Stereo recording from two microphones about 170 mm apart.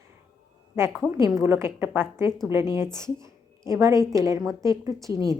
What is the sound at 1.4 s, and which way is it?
A woman's voice, 15° right (ahead or behind).